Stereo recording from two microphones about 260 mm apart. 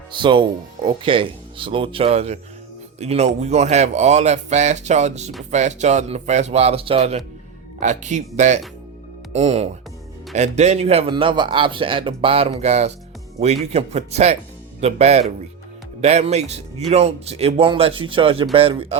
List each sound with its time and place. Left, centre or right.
0.1 s a man's voice: centre